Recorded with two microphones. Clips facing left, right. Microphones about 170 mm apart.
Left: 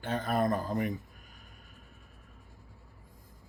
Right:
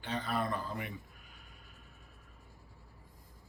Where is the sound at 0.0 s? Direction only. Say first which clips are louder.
Left 6 dB; 45° left (ahead or behind).